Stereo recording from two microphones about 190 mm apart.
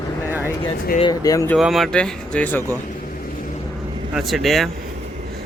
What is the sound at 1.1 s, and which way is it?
Speech, 20° left (ahead or behind).